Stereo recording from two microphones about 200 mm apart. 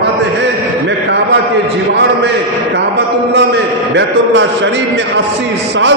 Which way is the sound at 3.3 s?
60° right (ahead or behind).